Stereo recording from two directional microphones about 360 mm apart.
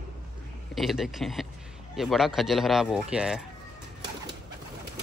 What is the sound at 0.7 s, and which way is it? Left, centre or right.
Speech, centre.